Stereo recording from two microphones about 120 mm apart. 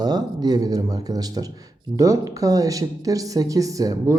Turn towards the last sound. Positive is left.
turn(degrees=-30)  # may be behind; listen again after turning